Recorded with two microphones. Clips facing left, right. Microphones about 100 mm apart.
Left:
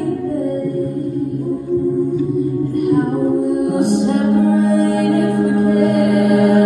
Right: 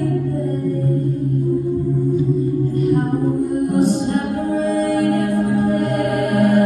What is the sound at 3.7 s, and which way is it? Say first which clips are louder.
Music: left 2 dB; 60° left (ahead or behind).